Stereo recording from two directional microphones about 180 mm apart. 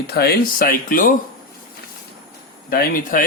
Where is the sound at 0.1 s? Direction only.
60° left (ahead or behind).